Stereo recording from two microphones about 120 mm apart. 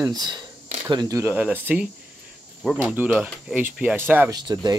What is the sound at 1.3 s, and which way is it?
Speech, 15° right (ahead or behind).